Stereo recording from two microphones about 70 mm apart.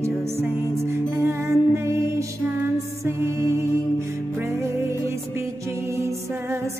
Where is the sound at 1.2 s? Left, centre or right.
Right.